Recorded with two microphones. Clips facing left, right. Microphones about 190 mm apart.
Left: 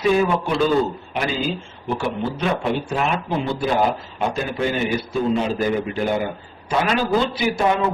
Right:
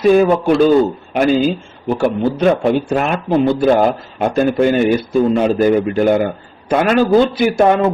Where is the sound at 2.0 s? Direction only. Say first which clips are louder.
Right 10 dB; 45° right (ahead or behind).